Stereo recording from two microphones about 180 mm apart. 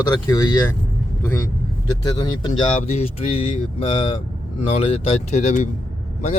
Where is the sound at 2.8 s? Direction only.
35° left (ahead or behind).